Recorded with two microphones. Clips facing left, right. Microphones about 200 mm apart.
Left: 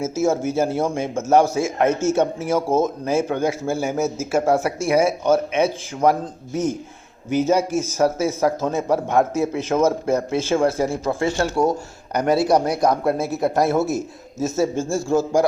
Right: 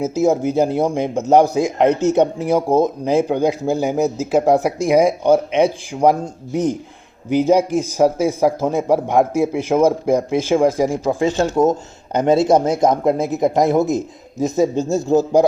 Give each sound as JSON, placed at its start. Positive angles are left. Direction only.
{"t": 0.0, "sound": "speech", "side_deg": -15}